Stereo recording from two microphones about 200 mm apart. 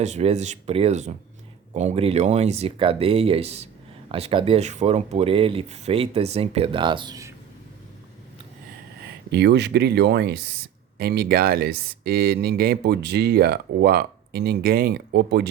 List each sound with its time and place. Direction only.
0.0 s speech: 35° right (ahead or behind); by 7.3 s 15° right (ahead or behind)
9.3 s speech: 60° right (ahead or behind)